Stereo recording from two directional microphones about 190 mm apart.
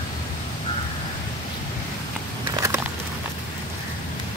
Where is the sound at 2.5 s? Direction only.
15° right (ahead or behind).